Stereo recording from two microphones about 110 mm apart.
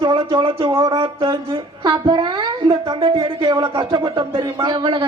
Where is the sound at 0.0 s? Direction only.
50° right (ahead or behind).